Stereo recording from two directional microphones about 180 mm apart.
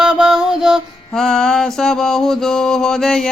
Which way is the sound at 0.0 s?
5° right (ahead or behind).